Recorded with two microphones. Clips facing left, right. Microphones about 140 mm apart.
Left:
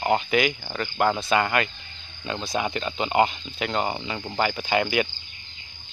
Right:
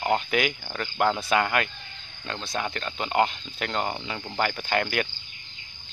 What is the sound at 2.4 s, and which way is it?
Speech, 10° left (ahead or behind).